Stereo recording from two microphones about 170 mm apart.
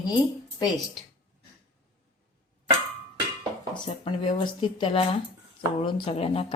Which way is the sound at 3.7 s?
30° left (ahead or behind).